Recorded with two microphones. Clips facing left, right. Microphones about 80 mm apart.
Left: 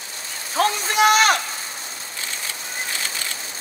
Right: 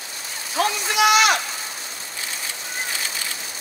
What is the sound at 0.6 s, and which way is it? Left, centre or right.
Speech, left.